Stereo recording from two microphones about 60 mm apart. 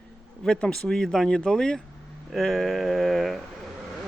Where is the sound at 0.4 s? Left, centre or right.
Centre.